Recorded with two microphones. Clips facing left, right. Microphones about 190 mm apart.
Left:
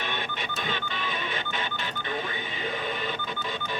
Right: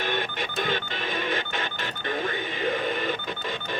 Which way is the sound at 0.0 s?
50° right (ahead or behind).